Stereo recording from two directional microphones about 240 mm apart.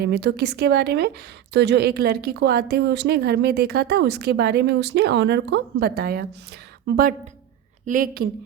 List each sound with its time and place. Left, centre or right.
0.0 s a woman's voice: right